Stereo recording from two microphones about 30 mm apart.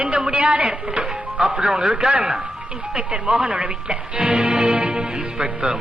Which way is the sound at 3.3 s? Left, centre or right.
Right.